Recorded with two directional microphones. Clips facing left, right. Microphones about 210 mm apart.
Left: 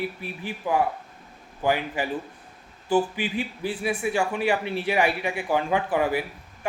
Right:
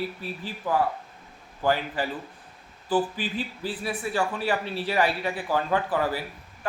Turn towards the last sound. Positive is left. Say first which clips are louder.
# left 2 dB
turn(degrees=15)  # may be behind; listen again after turning